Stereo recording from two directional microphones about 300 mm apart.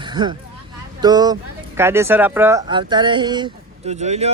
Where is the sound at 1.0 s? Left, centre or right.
Centre.